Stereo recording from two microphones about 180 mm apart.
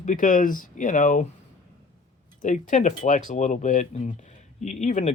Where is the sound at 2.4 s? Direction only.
45° left (ahead or behind).